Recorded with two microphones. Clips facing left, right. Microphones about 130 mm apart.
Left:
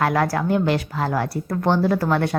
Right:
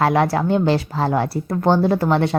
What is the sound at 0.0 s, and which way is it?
Speech, 25° right (ahead or behind).